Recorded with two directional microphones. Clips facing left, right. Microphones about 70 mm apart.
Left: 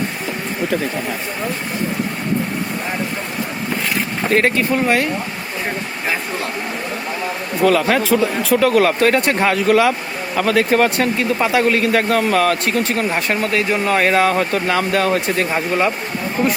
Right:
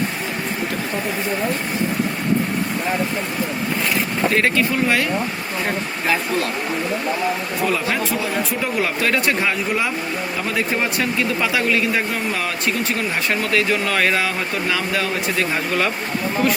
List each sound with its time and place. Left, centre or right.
4.3 s speech: left
8.1 s a man's voice: left
9.6 s a man's voice: left
15.5 s speech: left